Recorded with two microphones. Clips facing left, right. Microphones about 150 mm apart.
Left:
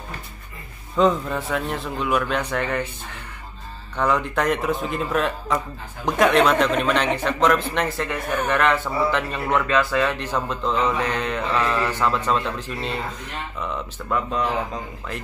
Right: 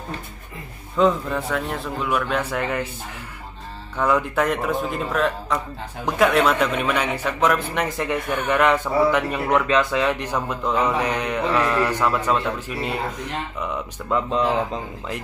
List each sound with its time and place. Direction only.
0.9 s a man's voice: centre (ahead or behind)
3.9 s a man's voice: 5° right (ahead or behind); by 15.1 s 20° right (ahead or behind)